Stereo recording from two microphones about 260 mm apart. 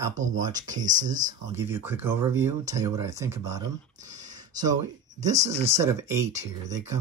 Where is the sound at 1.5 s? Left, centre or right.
Centre.